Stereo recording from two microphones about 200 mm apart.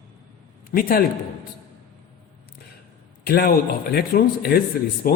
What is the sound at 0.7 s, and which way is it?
Speech, 45° left (ahead or behind).